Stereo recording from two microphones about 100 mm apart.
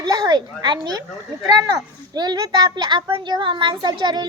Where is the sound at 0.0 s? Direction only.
45° right (ahead or behind).